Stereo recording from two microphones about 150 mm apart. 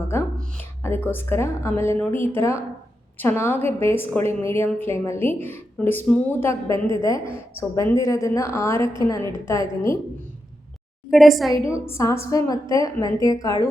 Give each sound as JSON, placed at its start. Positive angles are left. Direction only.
{"t": 0.8, "sound": "a woman's voice", "side_deg": 15}
{"t": 6.5, "sound": "a woman's voice", "side_deg": -35}
{"t": 7.0, "sound": "a woman's voice", "side_deg": 20}
{"t": 11.1, "sound": "a woman's voice", "side_deg": 0}
{"t": 11.9, "sound": "a woman's voice", "side_deg": 20}